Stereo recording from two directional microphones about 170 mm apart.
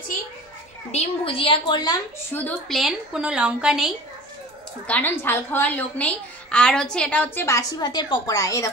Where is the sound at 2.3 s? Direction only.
10° left (ahead or behind).